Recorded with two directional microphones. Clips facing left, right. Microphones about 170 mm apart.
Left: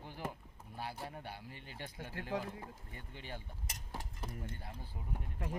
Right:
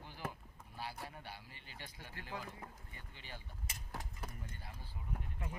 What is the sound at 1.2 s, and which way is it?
Speech, 55° left (ahead or behind).